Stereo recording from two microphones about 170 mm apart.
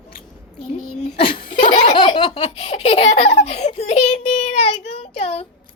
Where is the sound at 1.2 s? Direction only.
30° left (ahead or behind).